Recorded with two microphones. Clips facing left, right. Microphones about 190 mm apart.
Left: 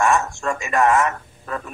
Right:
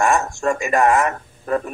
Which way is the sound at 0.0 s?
40° right (ahead or behind).